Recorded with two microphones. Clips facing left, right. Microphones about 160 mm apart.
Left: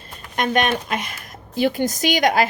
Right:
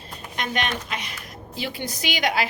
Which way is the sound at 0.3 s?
50° left (ahead or behind).